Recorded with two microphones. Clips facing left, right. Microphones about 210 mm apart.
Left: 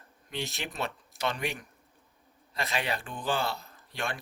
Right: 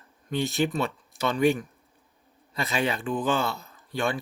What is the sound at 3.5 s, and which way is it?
Speech, centre (ahead or behind).